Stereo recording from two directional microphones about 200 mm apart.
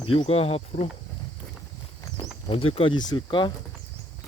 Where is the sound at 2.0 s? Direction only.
15° left (ahead or behind).